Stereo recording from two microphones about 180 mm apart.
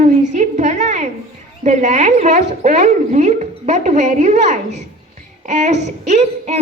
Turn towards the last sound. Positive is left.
turn(degrees=-40)  # may be behind; listen again after turning